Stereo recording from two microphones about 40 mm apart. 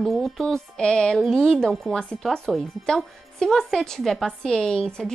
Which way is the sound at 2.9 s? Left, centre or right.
Centre.